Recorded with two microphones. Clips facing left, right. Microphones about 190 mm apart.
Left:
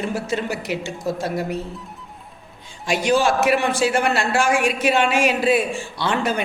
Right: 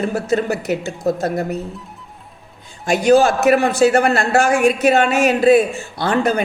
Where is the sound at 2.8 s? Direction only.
45° right (ahead or behind).